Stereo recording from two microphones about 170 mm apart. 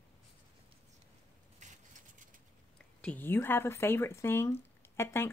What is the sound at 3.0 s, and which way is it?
A woman's voice, 10° left (ahead or behind).